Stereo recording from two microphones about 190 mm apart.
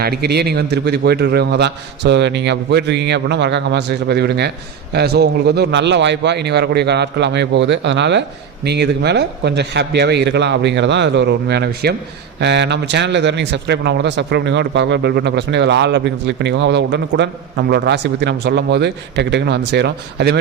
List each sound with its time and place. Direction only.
0.0 s speech: 60° right (ahead or behind)